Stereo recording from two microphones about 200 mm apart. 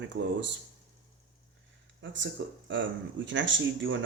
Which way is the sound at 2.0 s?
65° right (ahead or behind).